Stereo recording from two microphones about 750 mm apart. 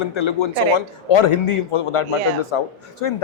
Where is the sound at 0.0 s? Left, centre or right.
Left.